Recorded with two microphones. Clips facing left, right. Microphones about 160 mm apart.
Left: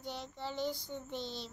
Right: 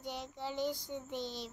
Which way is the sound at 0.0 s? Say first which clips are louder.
Right 1 dB; 15° right (ahead or behind).